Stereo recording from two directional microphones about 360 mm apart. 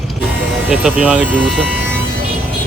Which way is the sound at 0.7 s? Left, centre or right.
Centre.